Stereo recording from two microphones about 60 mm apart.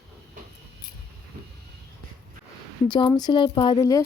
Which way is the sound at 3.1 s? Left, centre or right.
Left.